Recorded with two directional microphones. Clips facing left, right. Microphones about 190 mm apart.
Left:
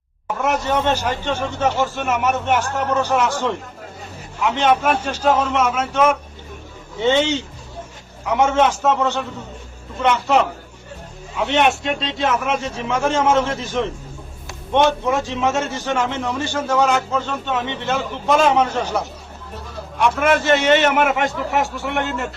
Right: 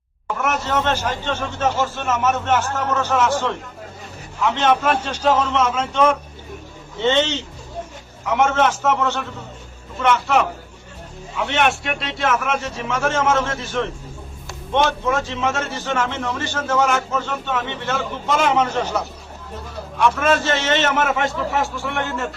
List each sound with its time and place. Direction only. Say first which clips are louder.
0.4 s a man's voice: left 2 dB; 15° left (ahead or behind)
4.4 s a man's voice: left 1 dB; 15° left (ahead or behind)
20.0 s a man's voice: left 1 dB; 15° left (ahead or behind)